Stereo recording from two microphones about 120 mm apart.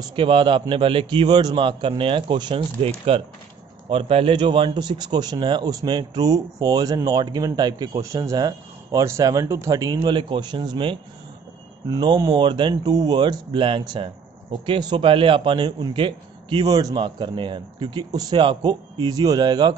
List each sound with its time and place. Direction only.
0.1 s a man's voice: 45° right (ahead or behind)
2.8 s a man's voice: 50° right (ahead or behind); by 9.9 s 30° right (ahead or behind)
10.0 s speech: 40° right (ahead or behind)